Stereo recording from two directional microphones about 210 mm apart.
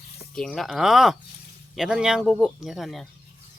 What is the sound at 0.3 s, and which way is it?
Speech, 5° left (ahead or behind).